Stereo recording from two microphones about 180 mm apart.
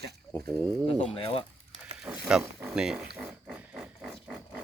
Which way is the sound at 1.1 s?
30° left (ahead or behind).